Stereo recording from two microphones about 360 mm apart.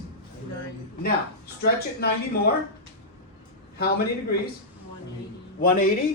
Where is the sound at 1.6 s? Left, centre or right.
Left.